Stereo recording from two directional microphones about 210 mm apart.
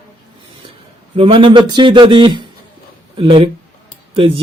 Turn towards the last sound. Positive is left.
turn(degrees=-25)  # may be behind; listen again after turning